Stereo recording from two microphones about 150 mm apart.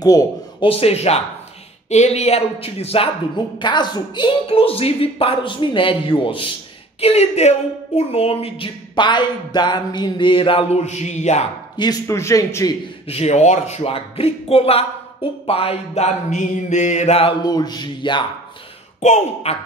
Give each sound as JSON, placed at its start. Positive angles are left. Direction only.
{"t": 0.0, "sound": "speech", "side_deg": 25}
{"t": 0.7, "sound": "speech", "side_deg": 40}
{"t": 3.5, "sound": "speech", "side_deg": 30}
{"t": 11.7, "sound": "a man's voice", "side_deg": 25}
{"t": 13.1, "sound": "speech", "side_deg": 45}
{"t": 18.9, "sound": "speech", "side_deg": 45}